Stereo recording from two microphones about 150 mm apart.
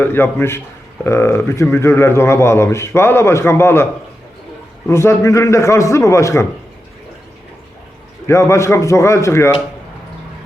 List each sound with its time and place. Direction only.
0.0 s a man's voice: 15° left (ahead or behind)
4.9 s a man's voice: 20° left (ahead or behind)
8.3 s a man's voice: 20° left (ahead or behind)